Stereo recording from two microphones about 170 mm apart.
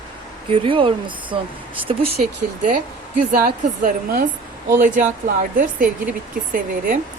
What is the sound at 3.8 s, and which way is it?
Speech, 55° right (ahead or behind).